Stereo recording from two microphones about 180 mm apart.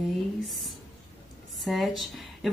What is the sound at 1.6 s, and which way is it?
Speech, centre (ahead or behind).